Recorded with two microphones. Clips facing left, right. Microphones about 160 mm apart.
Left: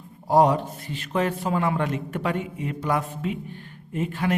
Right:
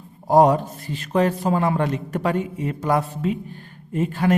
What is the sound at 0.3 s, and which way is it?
A man's voice, 45° right (ahead or behind).